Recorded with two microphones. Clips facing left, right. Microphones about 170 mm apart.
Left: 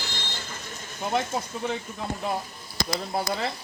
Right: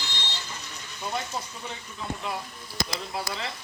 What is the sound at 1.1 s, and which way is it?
Speech, 50° left (ahead or behind).